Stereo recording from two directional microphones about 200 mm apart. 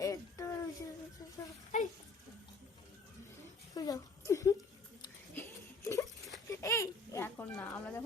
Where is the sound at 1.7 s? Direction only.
35° left (ahead or behind).